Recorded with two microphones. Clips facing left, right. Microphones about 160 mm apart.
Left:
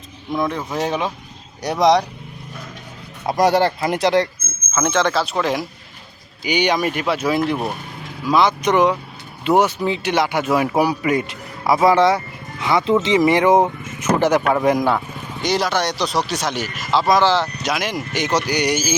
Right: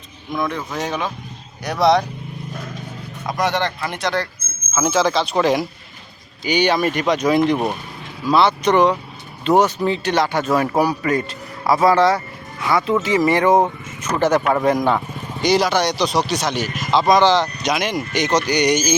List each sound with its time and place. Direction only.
0.3 s speech: 30° left (ahead or behind)
1.8 s speech: 15° left (ahead or behind)
3.2 s speech: 30° left (ahead or behind)
4.7 s speech: 5° right (ahead or behind)
6.4 s speech: 10° left (ahead or behind)
7.5 s speech: 15° right (ahead or behind)
8.2 s speech: 10° left (ahead or behind)
14.9 s speech: centre (ahead or behind)